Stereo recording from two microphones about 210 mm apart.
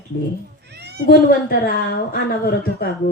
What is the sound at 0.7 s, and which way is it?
Cat, 50° right (ahead or behind).